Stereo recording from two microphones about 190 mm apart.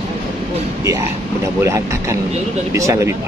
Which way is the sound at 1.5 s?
15° right (ahead or behind).